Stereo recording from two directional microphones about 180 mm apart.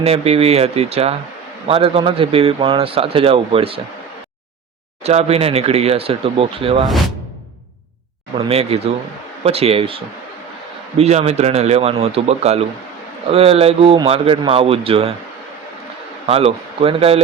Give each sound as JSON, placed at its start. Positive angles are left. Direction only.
{"t": 0.0, "sound": "a man's voice", "side_deg": -35}
{"t": 5.0, "sound": "a man's voice", "side_deg": -35}
{"t": 8.4, "sound": "a man's voice", "side_deg": -35}
{"t": 16.2, "sound": "a man's voice", "side_deg": -35}